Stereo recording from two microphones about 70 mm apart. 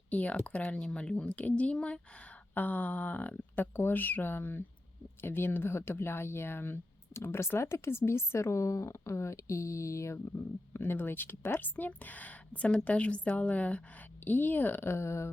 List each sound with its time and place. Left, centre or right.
0.1 s speech: centre; by 15.3 s left